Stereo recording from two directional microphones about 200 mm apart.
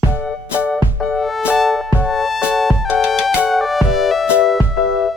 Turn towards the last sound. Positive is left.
turn(degrees=0)  # may be behind; listen again after turning